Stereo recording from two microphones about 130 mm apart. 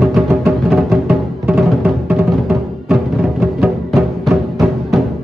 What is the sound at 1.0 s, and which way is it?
Music, 15° right (ahead or behind).